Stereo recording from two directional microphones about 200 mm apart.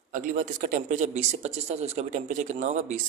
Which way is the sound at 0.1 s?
40° right (ahead or behind).